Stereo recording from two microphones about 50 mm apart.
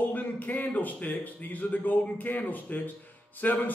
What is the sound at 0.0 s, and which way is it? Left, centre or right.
A man's voice, left.